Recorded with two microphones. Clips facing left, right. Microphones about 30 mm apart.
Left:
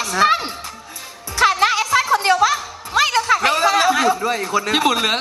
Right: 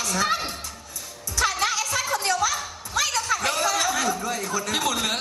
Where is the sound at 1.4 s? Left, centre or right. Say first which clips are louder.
Left 8 dB; left.